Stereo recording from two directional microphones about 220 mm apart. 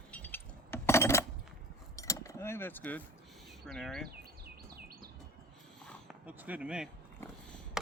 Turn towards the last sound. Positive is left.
turn(degrees=-5)  # may be behind; listen again after turning